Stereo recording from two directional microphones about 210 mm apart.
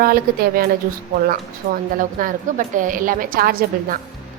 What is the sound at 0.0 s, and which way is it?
Speech, 45° right (ahead or behind).